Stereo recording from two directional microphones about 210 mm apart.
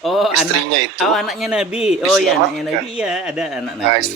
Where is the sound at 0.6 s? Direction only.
55° right (ahead or behind).